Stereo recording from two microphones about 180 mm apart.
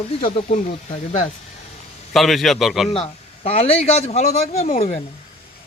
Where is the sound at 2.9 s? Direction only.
35° left (ahead or behind).